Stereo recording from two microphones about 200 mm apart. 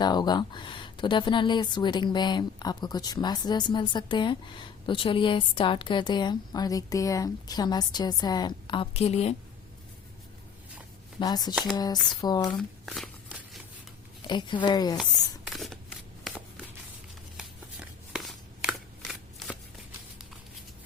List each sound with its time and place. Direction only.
0.0 s a woman's voice: 20° left (ahead or behind)
11.2 s a woman's voice: 20° left (ahead or behind)
12.5 s speech: centre (ahead or behind)
14.3 s a woman's voice: 20° left (ahead or behind)
15.4 s scissors: centre (ahead or behind)
16.2 s shuffling cards: centre (ahead or behind)